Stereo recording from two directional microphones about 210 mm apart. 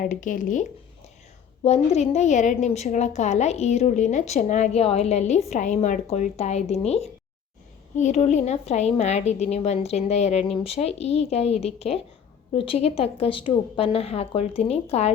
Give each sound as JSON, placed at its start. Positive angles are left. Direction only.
{"t": 0.0, "sound": "a woman's voice", "side_deg": 40}